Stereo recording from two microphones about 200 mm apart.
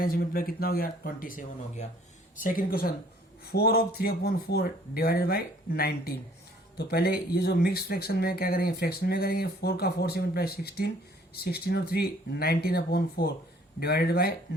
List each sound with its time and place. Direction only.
0.0 s speech: 50° left (ahead or behind)